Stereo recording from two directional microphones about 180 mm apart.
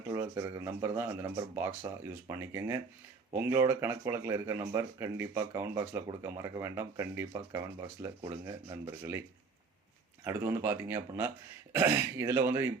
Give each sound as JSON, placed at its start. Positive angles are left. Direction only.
{"t": 0.1, "sound": "speech", "side_deg": -15}
{"t": 10.2, "sound": "speech", "side_deg": -15}